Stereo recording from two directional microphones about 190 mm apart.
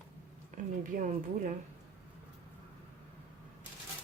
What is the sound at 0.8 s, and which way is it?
Speech, 45° right (ahead or behind).